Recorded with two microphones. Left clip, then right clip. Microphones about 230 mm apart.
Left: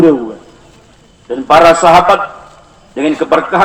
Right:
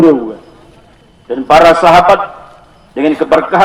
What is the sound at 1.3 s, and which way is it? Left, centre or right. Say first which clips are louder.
A man's voice: even; right.